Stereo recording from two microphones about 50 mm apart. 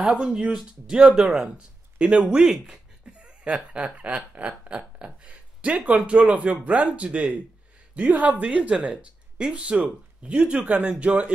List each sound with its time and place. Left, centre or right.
0.1 s speech: centre